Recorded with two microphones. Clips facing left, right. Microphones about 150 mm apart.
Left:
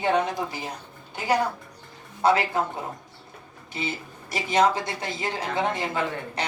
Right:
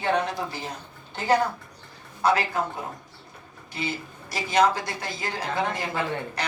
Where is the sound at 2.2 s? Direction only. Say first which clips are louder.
Left 2 dB; 25° left (ahead or behind).